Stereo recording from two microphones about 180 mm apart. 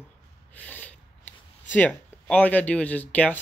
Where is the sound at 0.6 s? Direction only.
10° left (ahead or behind).